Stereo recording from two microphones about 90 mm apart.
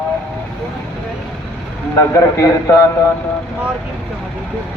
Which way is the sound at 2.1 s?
35° left (ahead or behind).